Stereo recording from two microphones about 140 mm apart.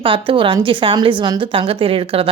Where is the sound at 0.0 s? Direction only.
40° right (ahead or behind).